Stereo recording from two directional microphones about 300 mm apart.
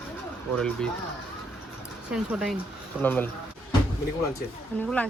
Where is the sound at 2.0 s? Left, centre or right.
Centre.